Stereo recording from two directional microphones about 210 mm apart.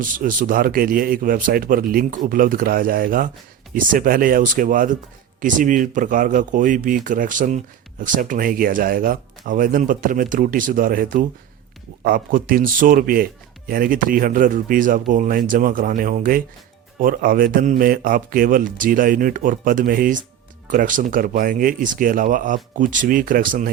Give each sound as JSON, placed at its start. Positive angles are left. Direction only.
{"t": 0.0, "sound": "speech", "side_deg": -40}